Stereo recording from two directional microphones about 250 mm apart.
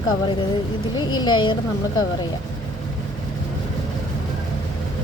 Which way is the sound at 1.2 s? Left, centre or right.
Centre.